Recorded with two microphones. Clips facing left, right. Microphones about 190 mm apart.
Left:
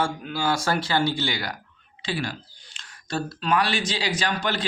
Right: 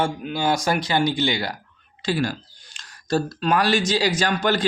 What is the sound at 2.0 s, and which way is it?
Speech, 45° right (ahead or behind).